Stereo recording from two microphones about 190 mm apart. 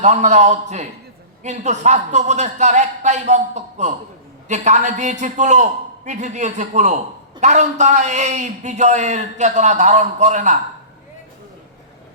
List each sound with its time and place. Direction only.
0.0 s a man's voice: 40° right (ahead or behind)